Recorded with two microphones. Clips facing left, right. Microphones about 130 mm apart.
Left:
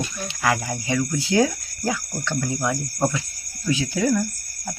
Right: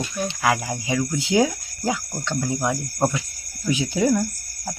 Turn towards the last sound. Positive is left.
turn(degrees=-20)  # may be behind; listen again after turning